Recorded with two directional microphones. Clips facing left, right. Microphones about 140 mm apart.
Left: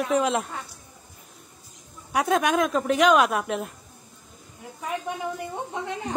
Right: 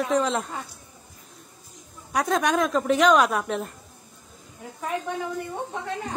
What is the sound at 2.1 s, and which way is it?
Speech, 5° left (ahead or behind).